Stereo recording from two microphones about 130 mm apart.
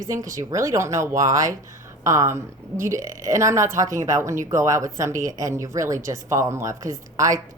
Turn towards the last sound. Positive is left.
turn(degrees=-25)  # may be behind; listen again after turning